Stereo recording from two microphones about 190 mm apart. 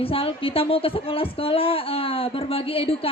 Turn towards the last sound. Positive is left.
turn(degrees=30)  # may be behind; listen again after turning